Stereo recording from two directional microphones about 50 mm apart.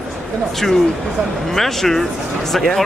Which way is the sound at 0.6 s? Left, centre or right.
Centre.